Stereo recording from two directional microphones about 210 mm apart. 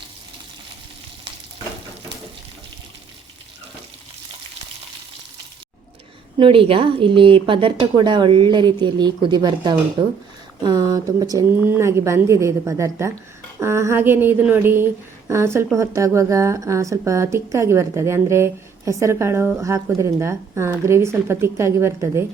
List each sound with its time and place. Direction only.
6.4 s a woman's voice: 25° right (ahead or behind)